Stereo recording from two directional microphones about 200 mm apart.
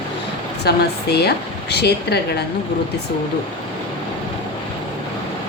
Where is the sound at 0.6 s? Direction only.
55° left (ahead or behind).